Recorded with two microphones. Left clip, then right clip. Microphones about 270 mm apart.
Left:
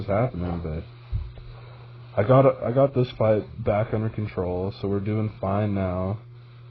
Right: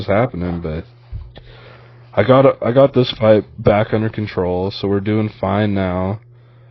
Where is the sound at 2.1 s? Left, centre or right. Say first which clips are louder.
Right 7 dB; right.